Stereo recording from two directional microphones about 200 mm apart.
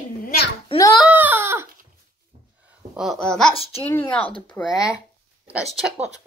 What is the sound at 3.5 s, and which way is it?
Speech, 30° left (ahead or behind).